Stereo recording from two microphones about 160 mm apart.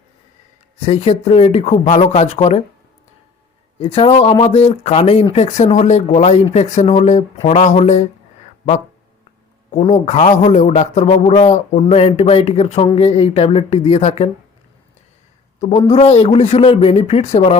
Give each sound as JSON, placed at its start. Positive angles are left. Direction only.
{"t": 0.8, "sound": "speech", "side_deg": 40}
{"t": 3.8, "sound": "speech", "side_deg": 35}
{"t": 9.7, "sound": "speech", "side_deg": 45}
{"t": 15.9, "sound": "speech", "side_deg": 40}